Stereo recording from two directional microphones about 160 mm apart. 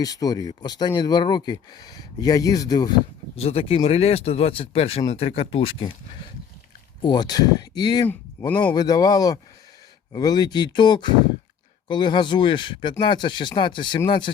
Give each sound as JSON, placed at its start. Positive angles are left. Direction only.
{"t": 0.0, "sound": "speech", "side_deg": 25}
{"t": 3.3, "sound": "speech", "side_deg": 40}
{"t": 8.0, "sound": "speech", "side_deg": 10}
{"t": 8.7, "sound": "speech", "side_deg": 25}